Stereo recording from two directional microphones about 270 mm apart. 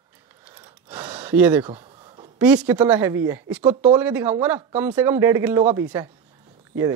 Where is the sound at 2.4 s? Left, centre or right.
Centre.